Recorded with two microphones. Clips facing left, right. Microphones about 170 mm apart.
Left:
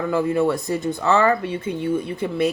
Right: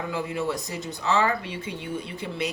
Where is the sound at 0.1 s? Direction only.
55° left (ahead or behind).